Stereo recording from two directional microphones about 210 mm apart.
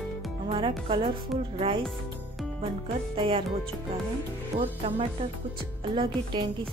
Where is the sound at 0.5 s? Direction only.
25° right (ahead or behind).